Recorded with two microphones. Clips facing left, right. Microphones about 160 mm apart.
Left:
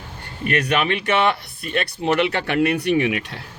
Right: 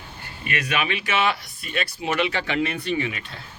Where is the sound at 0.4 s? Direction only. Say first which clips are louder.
Left 6 dB; 60° left (ahead or behind).